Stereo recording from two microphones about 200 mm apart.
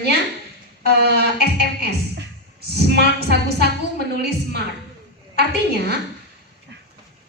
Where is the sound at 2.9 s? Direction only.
55° right (ahead or behind).